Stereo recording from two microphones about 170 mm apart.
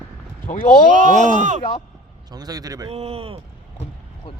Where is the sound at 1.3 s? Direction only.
45° right (ahead or behind).